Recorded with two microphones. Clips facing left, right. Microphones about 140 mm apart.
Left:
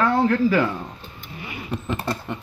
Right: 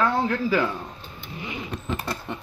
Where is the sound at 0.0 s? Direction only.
5° right (ahead or behind).